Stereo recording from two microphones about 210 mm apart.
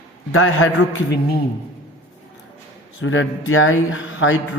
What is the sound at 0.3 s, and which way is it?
Speech, 75° left (ahead or behind).